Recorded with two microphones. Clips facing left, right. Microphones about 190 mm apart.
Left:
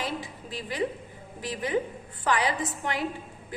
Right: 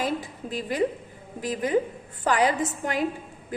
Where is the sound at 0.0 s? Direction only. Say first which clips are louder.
Right 5 dB; 45° right (ahead or behind).